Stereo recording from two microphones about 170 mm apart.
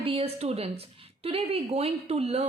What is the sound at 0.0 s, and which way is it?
A woman's voice, 35° right (ahead or behind).